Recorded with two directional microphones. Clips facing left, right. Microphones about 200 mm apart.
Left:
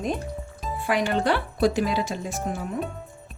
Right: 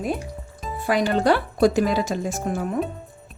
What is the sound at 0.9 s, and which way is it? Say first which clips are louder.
Speech: right 4 dB; 35° right (ahead or behind).